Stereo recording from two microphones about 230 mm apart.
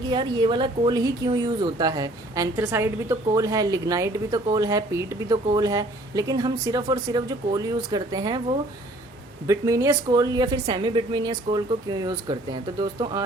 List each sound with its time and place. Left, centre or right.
0.1 s speech: centre
9.5 s speech: centre